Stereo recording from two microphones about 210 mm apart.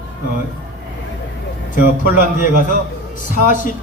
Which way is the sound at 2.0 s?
40° left (ahead or behind).